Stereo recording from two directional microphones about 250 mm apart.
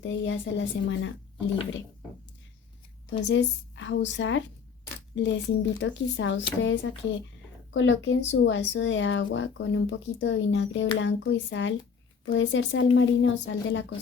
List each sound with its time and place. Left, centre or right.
0.0 s speech: left
3.1 s speech: left